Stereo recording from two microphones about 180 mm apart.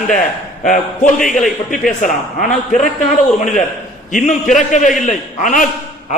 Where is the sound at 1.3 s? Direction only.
Centre (ahead or behind).